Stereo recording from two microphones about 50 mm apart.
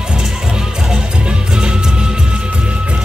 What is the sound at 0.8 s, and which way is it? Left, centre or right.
Music, centre.